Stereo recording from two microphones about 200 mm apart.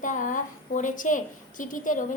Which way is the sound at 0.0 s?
40° left (ahead or behind).